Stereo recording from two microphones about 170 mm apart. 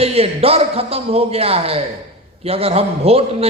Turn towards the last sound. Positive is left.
turn(degrees=-35)  # may be behind; listen again after turning